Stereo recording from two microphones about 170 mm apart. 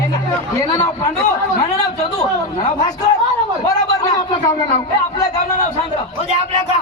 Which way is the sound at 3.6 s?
20° left (ahead or behind).